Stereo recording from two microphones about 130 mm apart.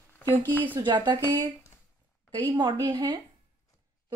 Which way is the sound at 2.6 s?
35° right (ahead or behind).